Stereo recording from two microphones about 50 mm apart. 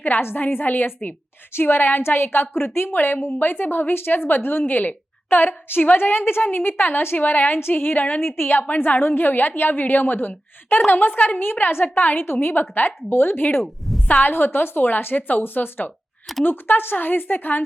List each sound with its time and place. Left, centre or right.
0.0 s a woman's voice: left
3.2 s speech: left
3.4 s speech: left
5.4 s a woman's voice: left
8.4 s a woman's voice: left
9.0 s a woman's voice: left